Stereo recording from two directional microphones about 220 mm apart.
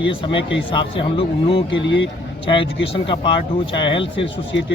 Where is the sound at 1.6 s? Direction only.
55° left (ahead or behind).